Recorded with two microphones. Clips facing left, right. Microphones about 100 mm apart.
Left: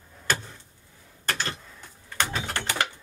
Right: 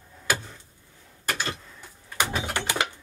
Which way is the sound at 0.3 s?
10° right (ahead or behind).